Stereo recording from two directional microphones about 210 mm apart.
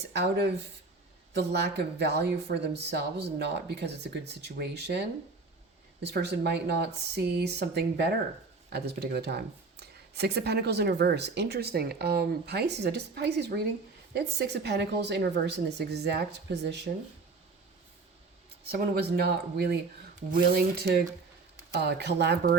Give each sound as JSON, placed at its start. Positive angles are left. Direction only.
{"t": 0.1, "sound": "speech", "side_deg": -50}
{"t": 18.6, "sound": "speech", "side_deg": -50}
{"t": 21.7, "sound": "speech", "side_deg": -50}